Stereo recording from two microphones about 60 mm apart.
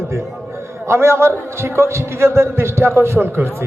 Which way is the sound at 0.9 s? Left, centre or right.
Right.